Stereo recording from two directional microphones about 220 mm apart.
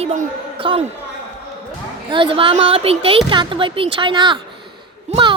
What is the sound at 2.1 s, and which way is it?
Speech, 20° right (ahead or behind).